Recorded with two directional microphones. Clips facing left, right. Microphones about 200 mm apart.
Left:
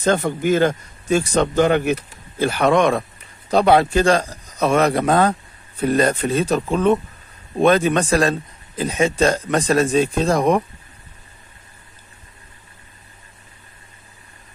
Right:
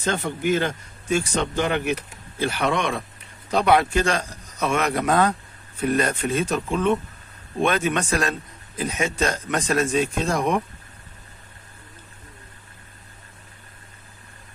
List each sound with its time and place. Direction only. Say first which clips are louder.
0.0 s a man's voice: left 6 dB; 40° left (ahead or behind)
3.4 s a man's voice: left 4 dB; 30° left (ahead or behind)